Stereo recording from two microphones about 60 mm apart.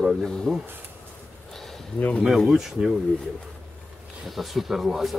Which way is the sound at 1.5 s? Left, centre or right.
Centre.